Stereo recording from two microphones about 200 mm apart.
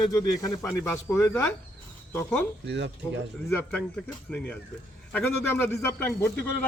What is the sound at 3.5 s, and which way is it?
A man's voice, 5° left (ahead or behind).